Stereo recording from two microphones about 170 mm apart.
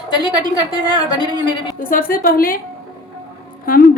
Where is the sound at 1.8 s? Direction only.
55° left (ahead or behind).